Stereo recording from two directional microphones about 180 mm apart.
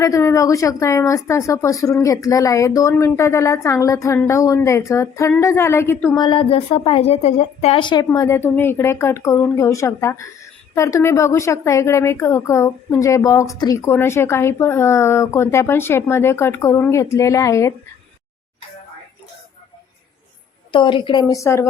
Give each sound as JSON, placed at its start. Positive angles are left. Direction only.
{"t": 0.0, "sound": "a woman's voice", "side_deg": 15}
{"t": 6.1, "sound": "a woman's voice", "side_deg": 25}
{"t": 20.7, "sound": "a woman's voice", "side_deg": 25}